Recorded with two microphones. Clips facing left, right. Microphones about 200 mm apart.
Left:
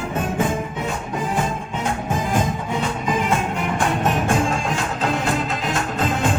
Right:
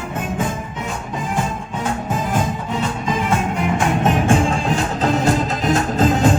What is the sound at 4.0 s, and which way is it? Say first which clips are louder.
Music: right 5 dB; 30° right (ahead or behind).